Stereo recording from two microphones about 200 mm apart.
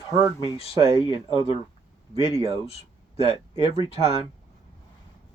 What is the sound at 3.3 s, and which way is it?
Speech, 30° left (ahead or behind).